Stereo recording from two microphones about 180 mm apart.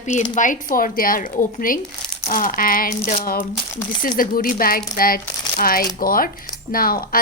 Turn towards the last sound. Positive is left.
turn(degrees=55)  # may be behind; listen again after turning